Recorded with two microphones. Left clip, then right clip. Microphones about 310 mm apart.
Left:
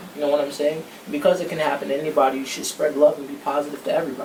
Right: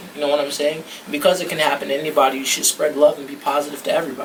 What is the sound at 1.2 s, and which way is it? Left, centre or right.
Speech, centre.